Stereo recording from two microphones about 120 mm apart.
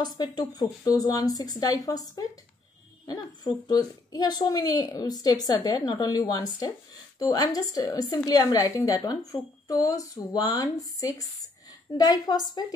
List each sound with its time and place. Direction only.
0.2 s a woman's voice: 35° left (ahead or behind)